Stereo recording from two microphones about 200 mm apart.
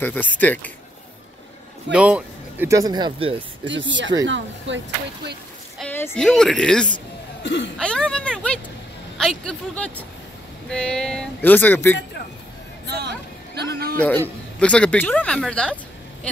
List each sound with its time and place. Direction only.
0.0 s speech: 10° left (ahead or behind)
1.9 s speech: 5° right (ahead or behind); by 3.3 s 25° right (ahead or behind)
3.6 s speech: 65° right (ahead or behind)
5.8 s a woman's voice: 10° left (ahead or behind)
7.4 s speech: 65° left (ahead or behind)
7.7 s speech: 5° left (ahead or behind)
12.8 s hubbub: 55° right (ahead or behind)
13.7 s a man's voice: 50° right (ahead or behind)
13.9 s speech: 5° left (ahead or behind)